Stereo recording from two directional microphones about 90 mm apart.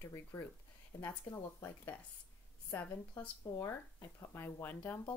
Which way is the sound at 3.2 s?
20° left (ahead or behind).